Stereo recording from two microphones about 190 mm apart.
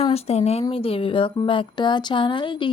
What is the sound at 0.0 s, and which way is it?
Speech, 35° left (ahead or behind).